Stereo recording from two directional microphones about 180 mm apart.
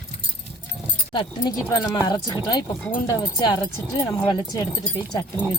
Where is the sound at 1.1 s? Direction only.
25° left (ahead or behind).